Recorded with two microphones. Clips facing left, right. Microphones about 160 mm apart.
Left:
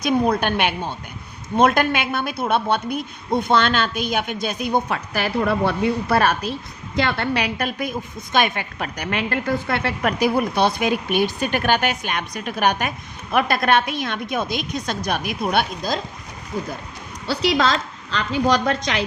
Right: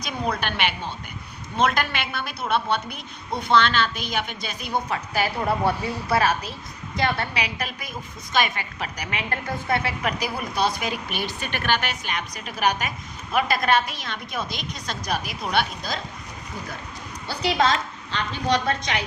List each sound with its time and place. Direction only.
0.0 s a woman's voice: 50° left (ahead or behind)
17.2 s a woman's voice: 90° left